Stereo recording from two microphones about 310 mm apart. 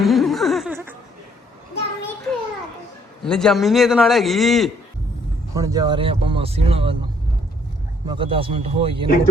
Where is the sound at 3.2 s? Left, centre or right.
Centre.